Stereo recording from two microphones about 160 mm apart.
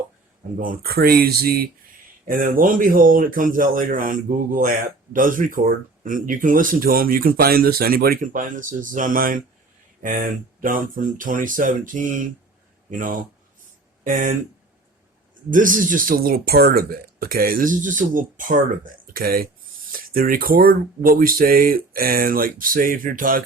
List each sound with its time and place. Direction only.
0.6 s speech: 65° right (ahead or behind)
2.2 s speech: 60° right (ahead or behind)
15.4 s speech: 55° right (ahead or behind)